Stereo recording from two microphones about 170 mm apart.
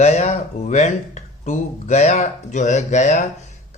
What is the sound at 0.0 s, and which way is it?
Speech, 40° left (ahead or behind).